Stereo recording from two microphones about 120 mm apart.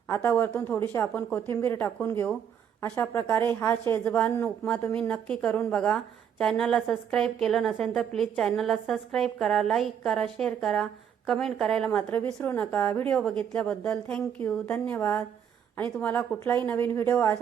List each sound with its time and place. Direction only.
0.1 s a woman's voice: 15° left (ahead or behind)
12.1 s a woman's voice: 15° left (ahead or behind)